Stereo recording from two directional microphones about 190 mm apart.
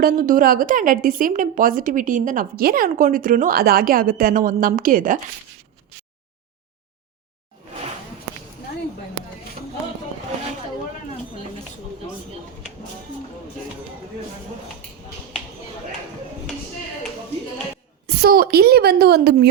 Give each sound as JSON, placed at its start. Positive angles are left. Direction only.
{"t": 0.0, "sound": "a woman's voice", "side_deg": -45}
{"t": 18.0, "sound": "a woman's voice", "side_deg": -55}